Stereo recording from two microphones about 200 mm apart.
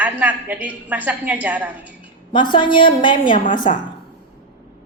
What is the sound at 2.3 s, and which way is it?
A woman's voice, 25° left (ahead or behind).